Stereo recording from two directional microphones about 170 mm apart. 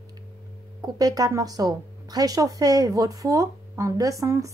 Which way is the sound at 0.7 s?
20° right (ahead or behind).